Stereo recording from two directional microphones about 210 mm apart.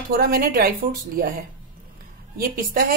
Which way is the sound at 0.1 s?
45° right (ahead or behind).